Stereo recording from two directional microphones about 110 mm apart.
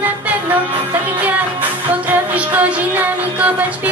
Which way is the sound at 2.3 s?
15° right (ahead or behind).